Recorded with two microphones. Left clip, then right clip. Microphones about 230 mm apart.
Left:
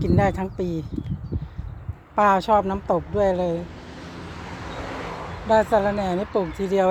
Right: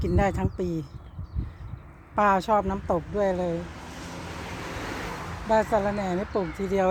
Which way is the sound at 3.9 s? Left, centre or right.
Right.